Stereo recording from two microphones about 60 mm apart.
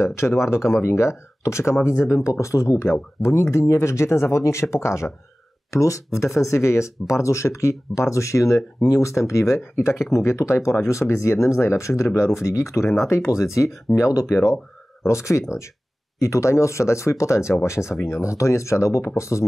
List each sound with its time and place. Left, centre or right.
0.0 s speech: left
5.7 s speech: left